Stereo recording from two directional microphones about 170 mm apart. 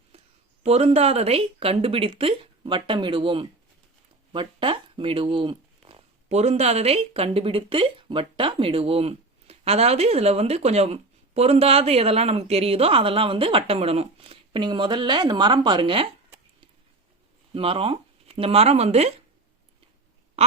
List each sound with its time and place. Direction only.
0.6 s speech: 40° right (ahead or behind)
6.2 s speech: 40° right (ahead or behind)
17.5 s speech: 30° right (ahead or behind)